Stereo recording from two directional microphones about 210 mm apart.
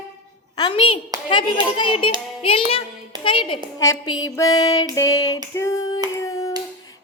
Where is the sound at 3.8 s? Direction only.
15° left (ahead or behind).